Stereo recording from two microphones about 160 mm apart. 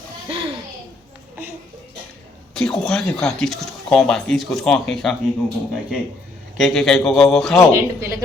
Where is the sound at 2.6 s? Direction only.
5° left (ahead or behind).